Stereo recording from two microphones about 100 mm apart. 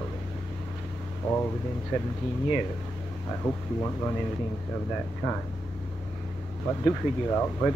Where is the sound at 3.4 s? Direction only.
20° left (ahead or behind).